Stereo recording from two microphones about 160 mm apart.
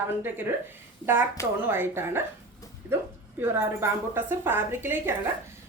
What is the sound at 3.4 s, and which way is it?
A woman's voice, 15° right (ahead or behind).